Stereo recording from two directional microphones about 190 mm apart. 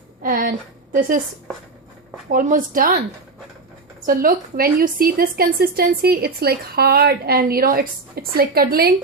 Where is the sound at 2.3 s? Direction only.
45° right (ahead or behind).